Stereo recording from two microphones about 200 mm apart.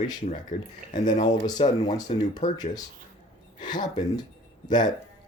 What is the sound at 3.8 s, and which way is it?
Speech, 20° left (ahead or behind).